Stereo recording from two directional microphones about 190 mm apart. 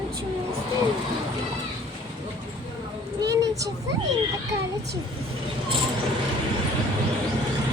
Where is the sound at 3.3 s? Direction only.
15° right (ahead or behind).